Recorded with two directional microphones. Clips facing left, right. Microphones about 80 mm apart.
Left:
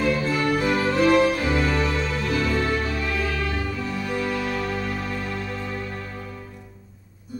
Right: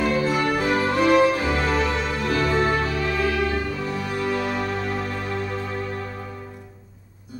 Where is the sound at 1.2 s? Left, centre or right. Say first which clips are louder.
Right 1 dB; right.